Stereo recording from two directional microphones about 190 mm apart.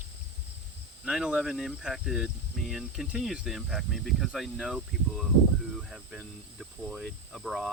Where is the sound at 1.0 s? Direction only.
5° right (ahead or behind).